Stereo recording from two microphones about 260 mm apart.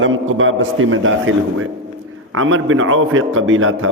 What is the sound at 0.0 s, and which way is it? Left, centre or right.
A man's voice, right.